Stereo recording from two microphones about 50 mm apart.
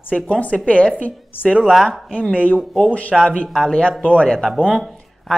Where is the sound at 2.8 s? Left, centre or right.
Left.